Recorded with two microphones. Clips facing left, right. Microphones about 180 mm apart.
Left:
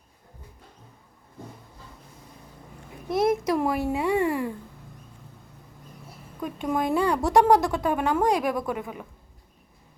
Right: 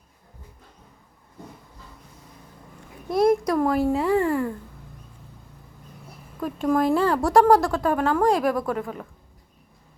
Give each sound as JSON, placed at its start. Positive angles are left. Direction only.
{"t": 3.1, "sound": "a child's voice", "side_deg": 0}
{"t": 6.4, "sound": "speech", "side_deg": 0}
{"t": 7.4, "sound": "speech", "side_deg": 20}
{"t": 7.7, "sound": "speech", "side_deg": 0}